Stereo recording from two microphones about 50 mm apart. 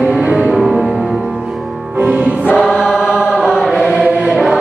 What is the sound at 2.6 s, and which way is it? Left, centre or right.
Choir, centre.